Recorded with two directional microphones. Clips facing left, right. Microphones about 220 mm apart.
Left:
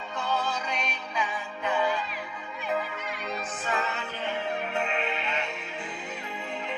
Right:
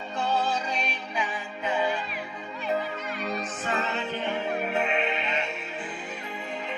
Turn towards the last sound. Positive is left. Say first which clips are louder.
# right 3 dB
turn(degrees=-5)  # may be behind; listen again after turning